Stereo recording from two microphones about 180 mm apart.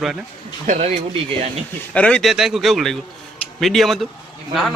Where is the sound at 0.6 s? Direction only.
40° right (ahead or behind).